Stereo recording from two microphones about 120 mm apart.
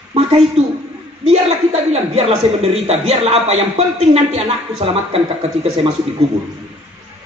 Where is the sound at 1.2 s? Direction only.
55° right (ahead or behind).